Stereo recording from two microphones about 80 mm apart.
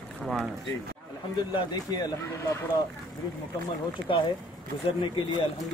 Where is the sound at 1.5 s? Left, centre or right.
Left.